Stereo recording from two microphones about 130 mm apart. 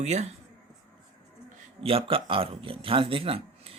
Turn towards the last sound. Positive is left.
turn(degrees=-45)  # may be behind; listen again after turning